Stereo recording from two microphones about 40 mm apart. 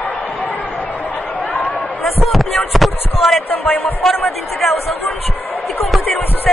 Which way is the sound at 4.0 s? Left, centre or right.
Centre.